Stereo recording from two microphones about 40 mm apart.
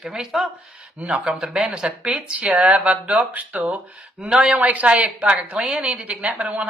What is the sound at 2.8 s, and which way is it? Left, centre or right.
Speech, right.